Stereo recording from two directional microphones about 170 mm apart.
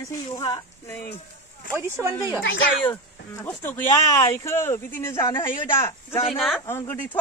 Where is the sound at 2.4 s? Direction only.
90° left.